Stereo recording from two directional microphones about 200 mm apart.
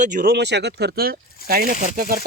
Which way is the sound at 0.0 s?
40° right (ahead or behind).